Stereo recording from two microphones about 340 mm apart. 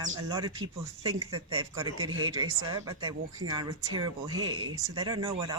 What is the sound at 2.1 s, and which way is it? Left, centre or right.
Speech, right.